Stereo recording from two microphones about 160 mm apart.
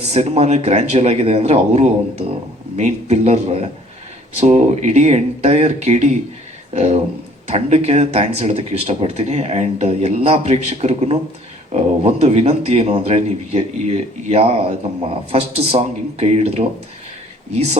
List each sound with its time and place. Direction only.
0.0 s speech: 40° right (ahead or behind)